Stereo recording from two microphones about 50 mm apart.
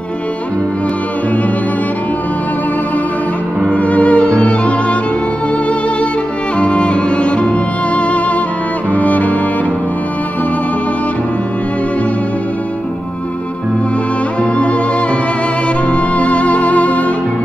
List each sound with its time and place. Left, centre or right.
3.7 s music: left
6.6 s music: left
15.9 s music: left